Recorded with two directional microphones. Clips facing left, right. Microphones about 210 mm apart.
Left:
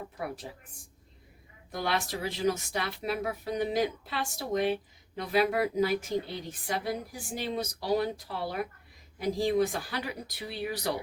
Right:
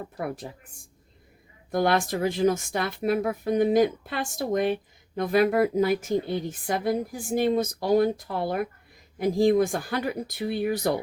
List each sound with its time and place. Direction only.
1.7 s speech: 50° right (ahead or behind)